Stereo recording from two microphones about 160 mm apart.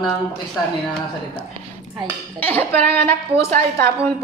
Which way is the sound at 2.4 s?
10° left (ahead or behind).